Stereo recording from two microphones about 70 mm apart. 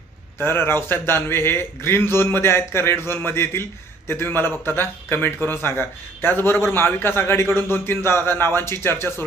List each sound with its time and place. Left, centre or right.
0.4 s a man's voice: left